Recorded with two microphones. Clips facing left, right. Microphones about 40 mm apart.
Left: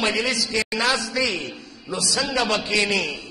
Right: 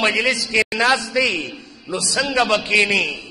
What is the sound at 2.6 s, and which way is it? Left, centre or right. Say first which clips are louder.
Speech: right 5 dB; right.